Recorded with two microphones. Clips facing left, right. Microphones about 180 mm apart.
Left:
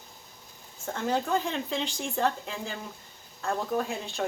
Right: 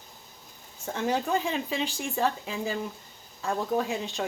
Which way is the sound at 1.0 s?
15° right (ahead or behind).